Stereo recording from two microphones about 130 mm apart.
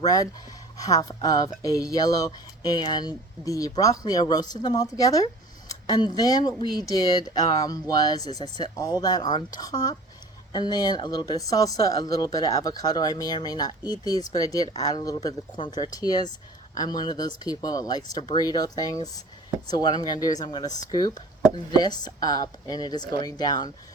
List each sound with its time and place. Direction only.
0.0 s speech: 25° left (ahead or behind)